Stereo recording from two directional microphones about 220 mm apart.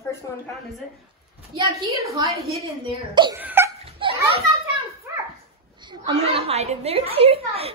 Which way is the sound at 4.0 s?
25° right (ahead or behind).